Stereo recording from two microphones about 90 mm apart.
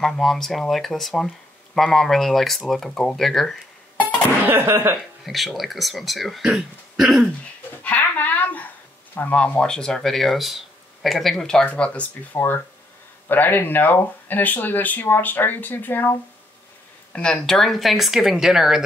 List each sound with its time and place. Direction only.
0.0 s speech: 5° left (ahead or behind)
4.0 s music: 25° right (ahead or behind)
4.9 s speech: centre (ahead or behind)
7.8 s speech: 20° left (ahead or behind)
12.4 s speech: 25° left (ahead or behind)
17.1 s speech: 10° left (ahead or behind)